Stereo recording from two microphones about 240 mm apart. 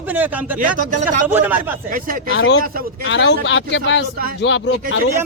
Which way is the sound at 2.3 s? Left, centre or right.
Left.